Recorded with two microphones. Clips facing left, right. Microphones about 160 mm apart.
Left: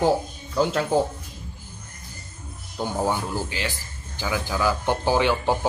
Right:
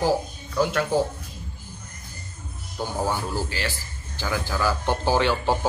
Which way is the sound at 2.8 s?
15° left (ahead or behind).